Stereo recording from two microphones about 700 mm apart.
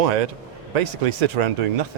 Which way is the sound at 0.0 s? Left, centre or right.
Right.